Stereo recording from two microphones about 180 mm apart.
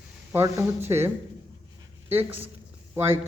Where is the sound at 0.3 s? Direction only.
15° right (ahead or behind).